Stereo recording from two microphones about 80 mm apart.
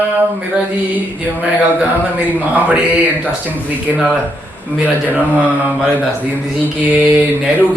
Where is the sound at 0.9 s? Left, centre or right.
Centre.